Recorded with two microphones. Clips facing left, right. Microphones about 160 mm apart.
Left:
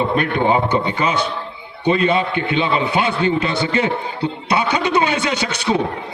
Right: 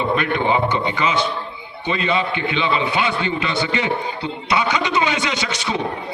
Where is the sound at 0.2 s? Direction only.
45° left (ahead or behind).